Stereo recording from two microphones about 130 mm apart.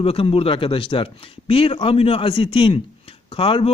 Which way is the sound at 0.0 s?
50° left (ahead or behind).